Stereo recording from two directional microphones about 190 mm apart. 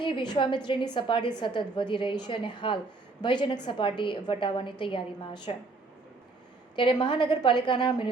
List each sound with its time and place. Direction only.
0.0 s a woman's voice: 25° left (ahead or behind)
6.7 s a woman's voice: 25° left (ahead or behind)